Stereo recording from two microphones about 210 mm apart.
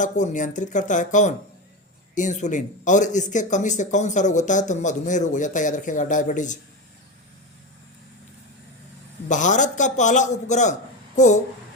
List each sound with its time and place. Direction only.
0.0 s speech: 35° left (ahead or behind)
9.3 s speech: 35° left (ahead or behind)